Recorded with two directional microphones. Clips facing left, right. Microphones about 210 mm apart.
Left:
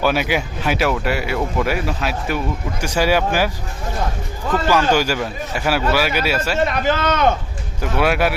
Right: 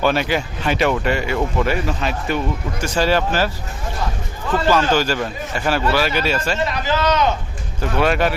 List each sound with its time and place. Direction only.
0.0 s speech: 10° left (ahead or behind)
4.7 s speech: 10° left (ahead or behind)
6.7 s speech: 55° left (ahead or behind)
7.8 s speech: 10° left (ahead or behind)